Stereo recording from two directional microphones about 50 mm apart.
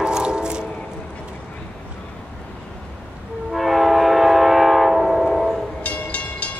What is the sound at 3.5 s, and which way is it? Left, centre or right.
Train, centre.